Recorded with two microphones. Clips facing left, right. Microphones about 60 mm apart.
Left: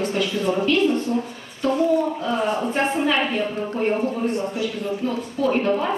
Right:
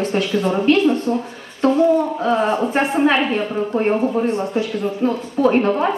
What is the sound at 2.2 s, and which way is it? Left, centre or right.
A woman's voice, right.